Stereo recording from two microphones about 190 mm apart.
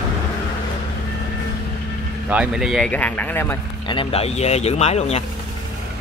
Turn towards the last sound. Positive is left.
turn(degrees=35)  # may be behind; listen again after turning